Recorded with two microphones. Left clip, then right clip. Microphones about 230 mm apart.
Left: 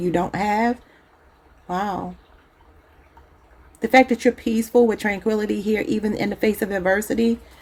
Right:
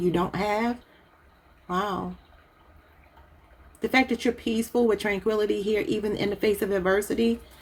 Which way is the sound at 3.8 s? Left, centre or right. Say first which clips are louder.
Left 8 dB; left.